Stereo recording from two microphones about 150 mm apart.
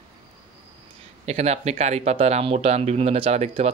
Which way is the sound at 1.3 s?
45° right (ahead or behind).